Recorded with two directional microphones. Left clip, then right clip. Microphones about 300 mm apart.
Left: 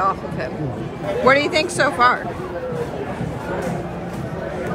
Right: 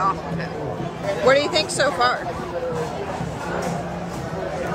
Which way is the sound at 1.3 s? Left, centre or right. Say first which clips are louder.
Left 2 dB; centre.